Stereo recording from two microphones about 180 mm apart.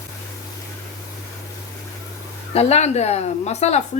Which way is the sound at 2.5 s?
35° left (ahead or behind).